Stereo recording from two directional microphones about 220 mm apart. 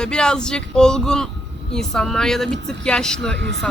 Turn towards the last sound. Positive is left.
turn(degrees=5)  # may be behind; listen again after turning